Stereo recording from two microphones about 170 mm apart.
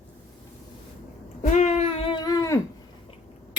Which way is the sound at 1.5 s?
40° left (ahead or behind).